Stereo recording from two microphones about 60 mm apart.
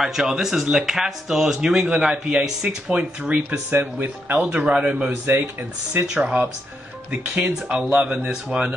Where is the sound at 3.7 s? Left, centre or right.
Right.